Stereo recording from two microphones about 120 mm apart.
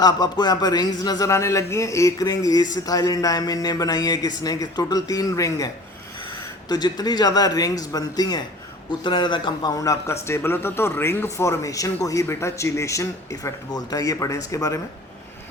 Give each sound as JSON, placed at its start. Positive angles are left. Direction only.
{"t": 0.0, "sound": "a man's voice", "side_deg": 35}